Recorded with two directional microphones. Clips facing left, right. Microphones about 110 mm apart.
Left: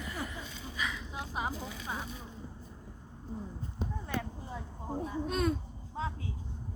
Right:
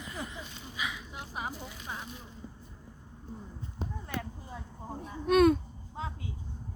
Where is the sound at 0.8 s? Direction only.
10° right (ahead or behind).